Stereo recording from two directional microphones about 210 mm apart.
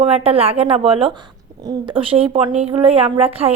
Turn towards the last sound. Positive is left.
turn(degrees=-30)  # may be behind; listen again after turning